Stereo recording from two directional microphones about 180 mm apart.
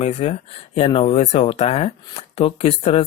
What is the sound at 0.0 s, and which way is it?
Speech, 35° left (ahead or behind).